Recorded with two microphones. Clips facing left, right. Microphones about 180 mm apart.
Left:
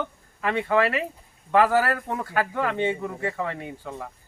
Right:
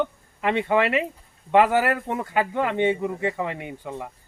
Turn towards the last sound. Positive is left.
turn(degrees=-15)  # may be behind; listen again after turning